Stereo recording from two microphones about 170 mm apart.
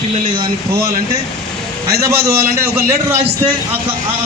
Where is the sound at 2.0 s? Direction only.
15° right (ahead or behind).